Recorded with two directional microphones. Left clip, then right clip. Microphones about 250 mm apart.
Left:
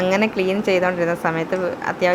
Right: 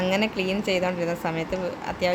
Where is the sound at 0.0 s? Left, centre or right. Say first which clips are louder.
Left 6 dB; centre.